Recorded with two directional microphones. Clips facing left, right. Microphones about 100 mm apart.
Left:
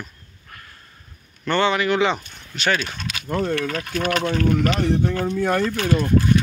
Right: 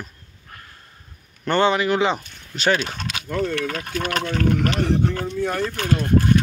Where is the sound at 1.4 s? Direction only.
40° right (ahead or behind).